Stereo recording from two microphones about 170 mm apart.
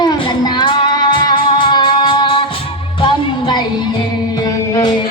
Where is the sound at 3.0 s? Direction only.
25° left (ahead or behind).